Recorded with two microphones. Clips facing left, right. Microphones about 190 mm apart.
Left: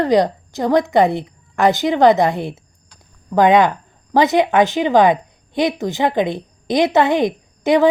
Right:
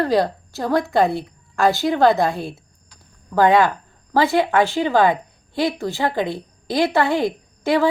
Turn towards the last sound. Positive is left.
turn(degrees=20)  # may be behind; listen again after turning